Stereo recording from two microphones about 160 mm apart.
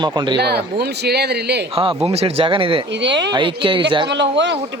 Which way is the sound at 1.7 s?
35° right (ahead or behind).